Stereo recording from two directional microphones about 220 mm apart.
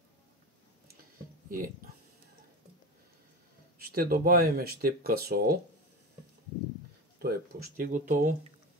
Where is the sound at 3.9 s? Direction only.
40° right (ahead or behind).